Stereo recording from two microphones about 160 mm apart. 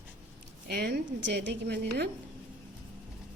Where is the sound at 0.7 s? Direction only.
90° right.